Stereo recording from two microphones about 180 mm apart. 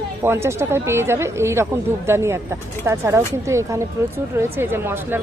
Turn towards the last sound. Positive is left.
turn(degrees=-10)  # may be behind; listen again after turning